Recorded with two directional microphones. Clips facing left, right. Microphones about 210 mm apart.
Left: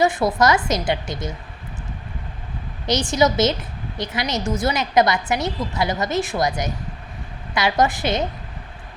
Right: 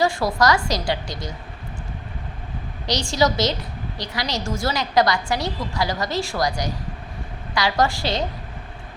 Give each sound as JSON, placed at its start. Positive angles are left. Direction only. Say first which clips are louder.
{"t": 0.0, "sound": "a woman's voice", "louder": "left 2 dB", "side_deg": 20}
{"t": 2.8, "sound": "a woman's voice", "louder": "left 2 dB", "side_deg": 20}